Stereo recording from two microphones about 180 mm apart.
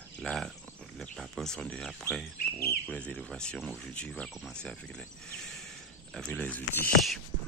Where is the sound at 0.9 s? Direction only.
Centre (ahead or behind).